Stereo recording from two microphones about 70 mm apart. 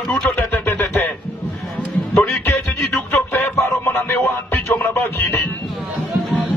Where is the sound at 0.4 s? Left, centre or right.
Left.